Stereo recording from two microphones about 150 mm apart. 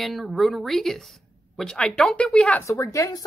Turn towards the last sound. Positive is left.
turn(degrees=25)  # may be behind; listen again after turning